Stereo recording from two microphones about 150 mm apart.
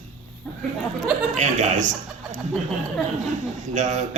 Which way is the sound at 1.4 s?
55° right (ahead or behind).